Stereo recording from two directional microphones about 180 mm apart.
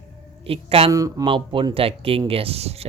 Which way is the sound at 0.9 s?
20° right (ahead or behind).